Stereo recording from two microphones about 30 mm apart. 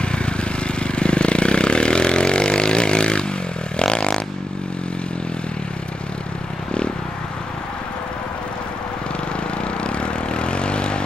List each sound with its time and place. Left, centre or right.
0.0 s vehicle: left
9.8 s vehicle: left